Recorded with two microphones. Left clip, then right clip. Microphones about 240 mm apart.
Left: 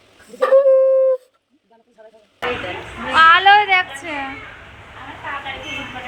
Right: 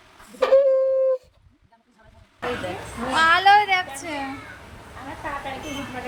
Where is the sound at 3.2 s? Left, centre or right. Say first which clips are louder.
Left 6 dB; centre.